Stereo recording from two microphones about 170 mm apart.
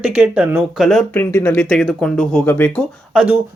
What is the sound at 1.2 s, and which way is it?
Speech, 15° left (ahead or behind).